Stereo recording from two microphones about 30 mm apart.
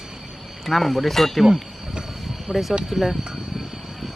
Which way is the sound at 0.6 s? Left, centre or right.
Centre.